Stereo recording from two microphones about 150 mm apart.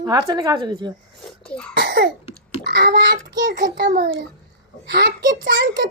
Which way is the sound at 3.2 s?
60° right (ahead or behind).